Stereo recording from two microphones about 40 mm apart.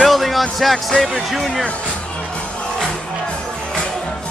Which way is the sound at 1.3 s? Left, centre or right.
Centre.